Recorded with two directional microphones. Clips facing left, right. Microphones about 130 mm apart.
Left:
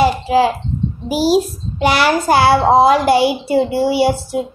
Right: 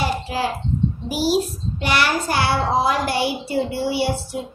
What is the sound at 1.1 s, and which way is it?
A child's voice, 90° left.